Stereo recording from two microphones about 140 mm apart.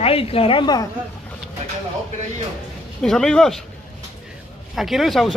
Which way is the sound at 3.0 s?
5° left (ahead or behind).